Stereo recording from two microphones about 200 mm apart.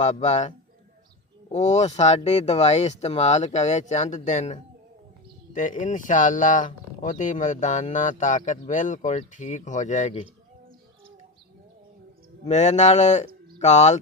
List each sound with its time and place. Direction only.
0.0 s speech: 35° left (ahead or behind)
10.2 s bird: 25° right (ahead or behind)
12.5 s speech: 35° left (ahead or behind)